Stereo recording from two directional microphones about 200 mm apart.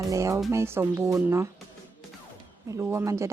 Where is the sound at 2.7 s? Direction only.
15° right (ahead or behind).